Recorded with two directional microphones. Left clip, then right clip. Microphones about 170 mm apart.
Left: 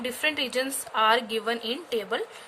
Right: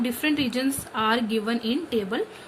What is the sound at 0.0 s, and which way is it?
A woman's voice, 20° left (ahead or behind).